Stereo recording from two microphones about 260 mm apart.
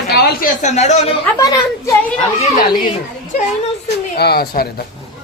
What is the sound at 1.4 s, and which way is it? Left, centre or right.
Speech, centre.